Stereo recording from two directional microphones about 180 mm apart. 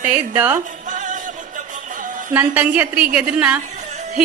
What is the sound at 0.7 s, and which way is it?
Music, 45° right (ahead or behind).